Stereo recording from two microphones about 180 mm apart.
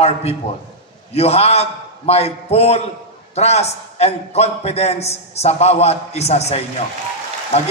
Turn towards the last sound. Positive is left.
turn(degrees=35)  # may be behind; listen again after turning